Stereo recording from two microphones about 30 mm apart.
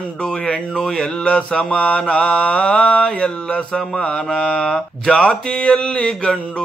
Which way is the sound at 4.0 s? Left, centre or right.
Left.